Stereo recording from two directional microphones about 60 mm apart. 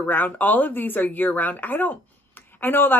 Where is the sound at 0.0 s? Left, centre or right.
Left.